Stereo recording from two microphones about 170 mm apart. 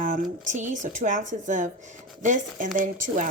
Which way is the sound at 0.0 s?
50° right (ahead or behind).